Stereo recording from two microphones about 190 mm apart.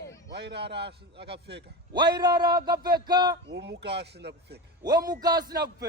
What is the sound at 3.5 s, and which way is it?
Speech, 65° right (ahead or behind).